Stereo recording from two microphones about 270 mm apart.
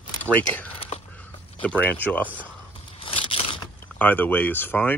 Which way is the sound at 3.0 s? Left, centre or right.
Centre.